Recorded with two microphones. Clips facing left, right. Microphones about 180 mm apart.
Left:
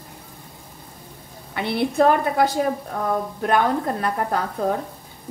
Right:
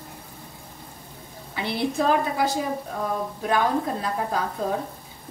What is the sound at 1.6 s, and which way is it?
A woman's voice, 60° left (ahead or behind).